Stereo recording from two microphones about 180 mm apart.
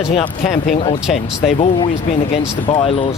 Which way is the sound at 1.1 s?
Centre (ahead or behind).